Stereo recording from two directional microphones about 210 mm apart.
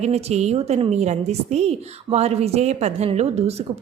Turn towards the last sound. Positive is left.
turn(degrees=-30)  # may be behind; listen again after turning